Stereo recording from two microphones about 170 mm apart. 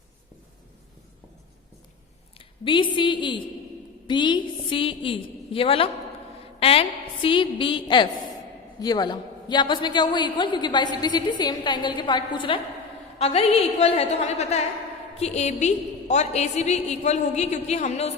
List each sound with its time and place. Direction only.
2.4 s a woman's voice: 30° left (ahead or behind)